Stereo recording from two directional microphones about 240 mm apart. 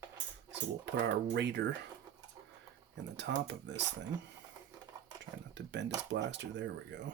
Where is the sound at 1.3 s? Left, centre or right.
Right.